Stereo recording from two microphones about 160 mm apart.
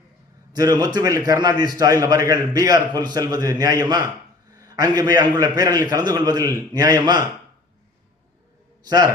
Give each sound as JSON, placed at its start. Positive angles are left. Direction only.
{"t": 0.5, "sound": "a man's voice", "side_deg": -20}